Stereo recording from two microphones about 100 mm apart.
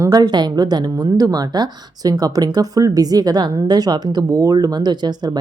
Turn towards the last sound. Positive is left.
turn(degrees=-45)  # may be behind; listen again after turning